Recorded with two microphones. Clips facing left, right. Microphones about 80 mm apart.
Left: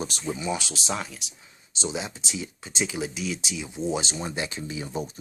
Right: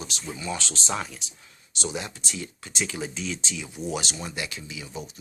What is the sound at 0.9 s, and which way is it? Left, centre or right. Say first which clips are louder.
Speech: even; centre.